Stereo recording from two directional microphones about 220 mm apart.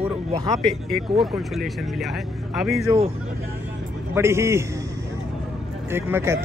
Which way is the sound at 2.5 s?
Centre (ahead or behind).